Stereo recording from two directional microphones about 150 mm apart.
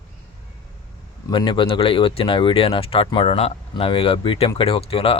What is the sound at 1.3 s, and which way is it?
Speech, 35° left (ahead or behind).